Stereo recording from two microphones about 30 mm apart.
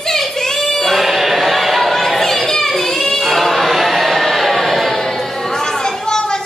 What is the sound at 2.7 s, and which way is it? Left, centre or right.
Child singing, centre.